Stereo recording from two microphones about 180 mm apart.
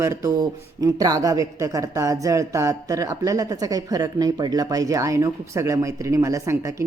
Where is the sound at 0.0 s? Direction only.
15° right (ahead or behind).